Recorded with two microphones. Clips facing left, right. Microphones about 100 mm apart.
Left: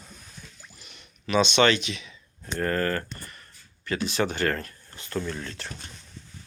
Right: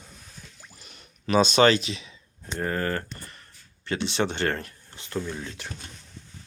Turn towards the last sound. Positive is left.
turn(degrees=-15)  # may be behind; listen again after turning